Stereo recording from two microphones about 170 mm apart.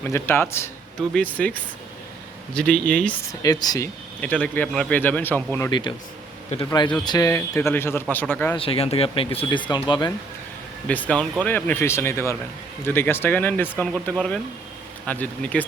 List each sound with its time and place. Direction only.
0.0 s a man's voice: 15° left (ahead or behind)
3.4 s speech: 20° left (ahead or behind)
4.2 s a man's voice: 5° left (ahead or behind)
8.5 s speech: 35° left (ahead or behind)
10.8 s a man's voice: 10° left (ahead or behind)